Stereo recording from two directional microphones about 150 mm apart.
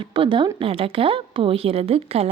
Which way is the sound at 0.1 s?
35° right (ahead or behind).